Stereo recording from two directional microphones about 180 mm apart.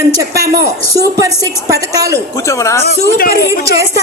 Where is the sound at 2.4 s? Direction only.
15° left (ahead or behind).